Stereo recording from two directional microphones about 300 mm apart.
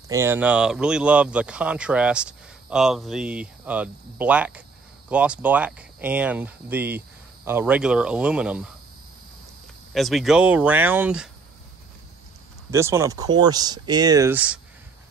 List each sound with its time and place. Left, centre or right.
0.1 s speech: centre
9.9 s speech: centre
12.7 s speech: centre